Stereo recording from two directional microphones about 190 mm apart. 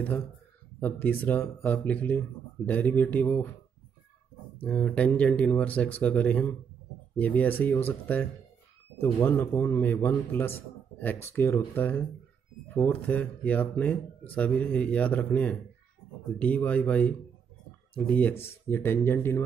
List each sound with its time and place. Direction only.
0.7 s speech: 10° left (ahead or behind)
4.6 s speech: 5° left (ahead or behind)